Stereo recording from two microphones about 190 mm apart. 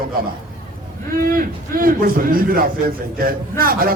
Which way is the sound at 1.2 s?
50° right (ahead or behind).